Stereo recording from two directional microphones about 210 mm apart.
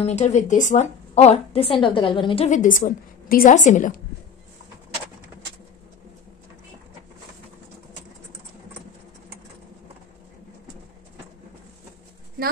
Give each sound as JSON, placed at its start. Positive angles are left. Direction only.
{"t": 0.0, "sound": "a woman's voice", "side_deg": 30}